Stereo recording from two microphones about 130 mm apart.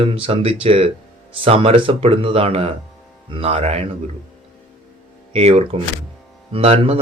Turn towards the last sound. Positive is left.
turn(degrees=-50)  # may be behind; listen again after turning